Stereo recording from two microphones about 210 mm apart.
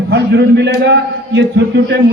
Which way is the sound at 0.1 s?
55° right (ahead or behind).